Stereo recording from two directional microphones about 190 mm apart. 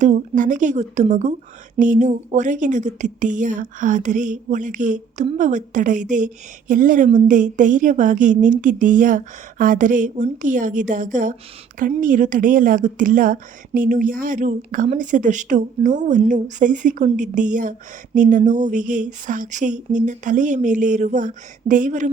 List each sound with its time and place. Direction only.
0.0 s a woman's voice: 40° right (ahead or behind)